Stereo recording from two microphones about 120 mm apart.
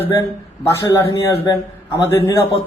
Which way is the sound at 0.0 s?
20° left (ahead or behind).